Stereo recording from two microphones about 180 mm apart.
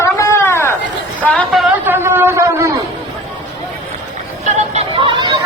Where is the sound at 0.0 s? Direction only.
15° left (ahead or behind).